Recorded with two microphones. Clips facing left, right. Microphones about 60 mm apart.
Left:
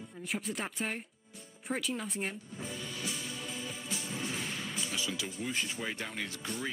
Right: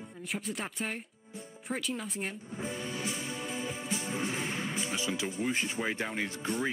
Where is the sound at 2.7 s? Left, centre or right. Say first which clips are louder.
Right 2 dB; right.